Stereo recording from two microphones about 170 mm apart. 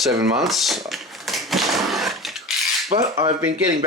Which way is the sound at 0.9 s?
Centre (ahead or behind).